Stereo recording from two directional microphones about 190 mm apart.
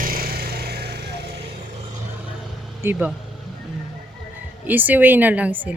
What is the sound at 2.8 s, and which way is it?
Speech, 10° right (ahead or behind).